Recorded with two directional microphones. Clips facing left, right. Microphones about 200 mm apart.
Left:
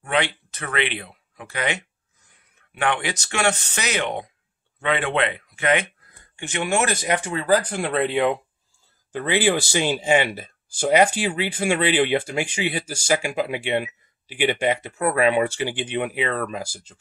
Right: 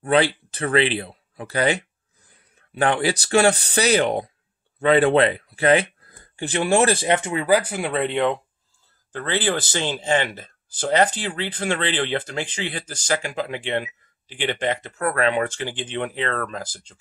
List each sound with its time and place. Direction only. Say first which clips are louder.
0.0 s speech: right 5 dB; 35° right (ahead or behind); by 17.0 s 5° left (ahead or behind)